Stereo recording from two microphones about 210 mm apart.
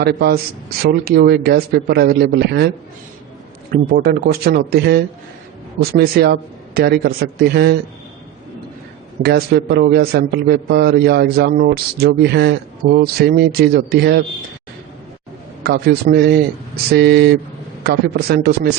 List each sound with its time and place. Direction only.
0.0 s a man's voice: 50° right (ahead or behind)
3.7 s a man's voice: 45° right (ahead or behind)
9.2 s a man's voice: 50° right (ahead or behind)
15.6 s a man's voice: 50° right (ahead or behind)